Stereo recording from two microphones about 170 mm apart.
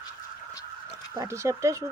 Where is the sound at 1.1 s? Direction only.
15° right (ahead or behind).